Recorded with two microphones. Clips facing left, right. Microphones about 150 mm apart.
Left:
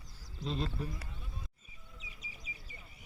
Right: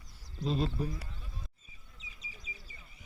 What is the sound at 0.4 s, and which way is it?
Speech, 10° right (ahead or behind).